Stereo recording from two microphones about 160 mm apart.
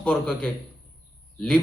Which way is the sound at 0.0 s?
5° left (ahead or behind).